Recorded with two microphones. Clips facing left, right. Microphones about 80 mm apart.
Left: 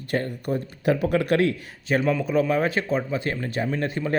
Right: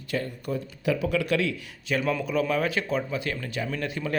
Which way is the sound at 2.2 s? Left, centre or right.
Left.